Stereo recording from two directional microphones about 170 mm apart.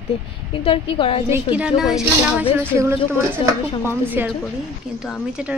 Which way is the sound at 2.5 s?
15° right (ahead or behind).